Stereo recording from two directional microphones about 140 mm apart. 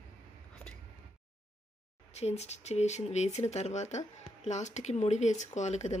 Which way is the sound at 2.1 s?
50° left (ahead or behind).